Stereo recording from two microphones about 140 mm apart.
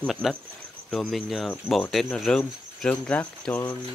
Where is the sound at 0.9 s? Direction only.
Centre (ahead or behind).